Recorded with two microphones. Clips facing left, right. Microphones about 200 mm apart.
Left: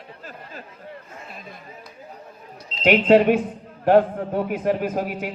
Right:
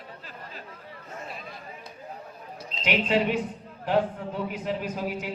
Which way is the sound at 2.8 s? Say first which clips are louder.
Left 10 dB; 55° left (ahead or behind).